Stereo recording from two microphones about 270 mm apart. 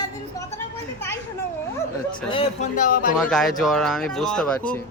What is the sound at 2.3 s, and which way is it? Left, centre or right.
Speech, left.